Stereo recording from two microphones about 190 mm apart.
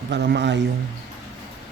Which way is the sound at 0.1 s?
65° right (ahead or behind).